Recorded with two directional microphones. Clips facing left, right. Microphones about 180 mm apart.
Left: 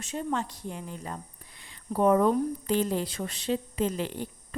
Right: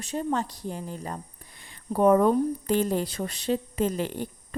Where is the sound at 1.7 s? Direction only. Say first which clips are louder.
Right 3 dB; 50° right (ahead or behind).